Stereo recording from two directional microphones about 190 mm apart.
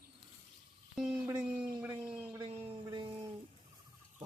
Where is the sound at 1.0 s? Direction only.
Centre (ahead or behind).